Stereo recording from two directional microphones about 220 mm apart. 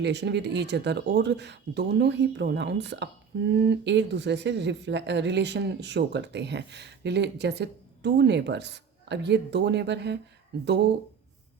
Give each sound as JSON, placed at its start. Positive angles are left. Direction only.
{"t": 0.0, "sound": "speech", "side_deg": -50}